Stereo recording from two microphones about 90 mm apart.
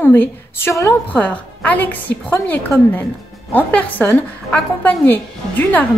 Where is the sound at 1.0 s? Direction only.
15° left (ahead or behind).